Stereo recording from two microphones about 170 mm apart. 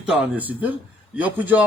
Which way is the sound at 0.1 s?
10° right (ahead or behind).